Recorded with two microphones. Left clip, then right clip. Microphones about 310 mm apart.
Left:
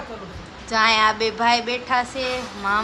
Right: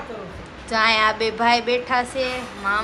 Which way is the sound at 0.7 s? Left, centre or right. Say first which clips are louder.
Left 1 dB; centre.